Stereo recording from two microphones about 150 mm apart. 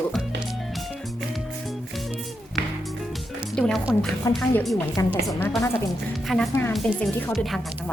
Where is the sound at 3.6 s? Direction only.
5° left (ahead or behind).